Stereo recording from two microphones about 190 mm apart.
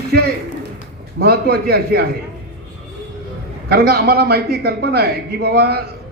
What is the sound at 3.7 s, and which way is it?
A man's voice, 55° right (ahead or behind).